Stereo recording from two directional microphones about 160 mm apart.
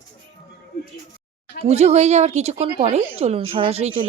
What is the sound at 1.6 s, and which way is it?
Speech, 40° right (ahead or behind).